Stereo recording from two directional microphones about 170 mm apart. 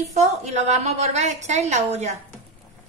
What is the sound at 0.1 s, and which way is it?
A woman's voice, 40° right (ahead or behind).